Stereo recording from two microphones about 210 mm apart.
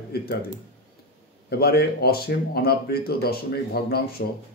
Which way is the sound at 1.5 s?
50° left (ahead or behind).